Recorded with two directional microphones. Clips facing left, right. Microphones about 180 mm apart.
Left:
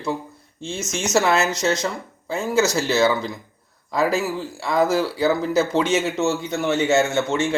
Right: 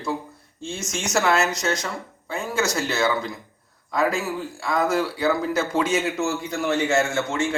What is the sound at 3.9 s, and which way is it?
Speech, 35° left (ahead or behind).